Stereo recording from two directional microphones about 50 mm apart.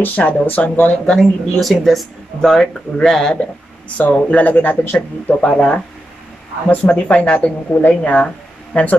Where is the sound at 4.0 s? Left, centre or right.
Left.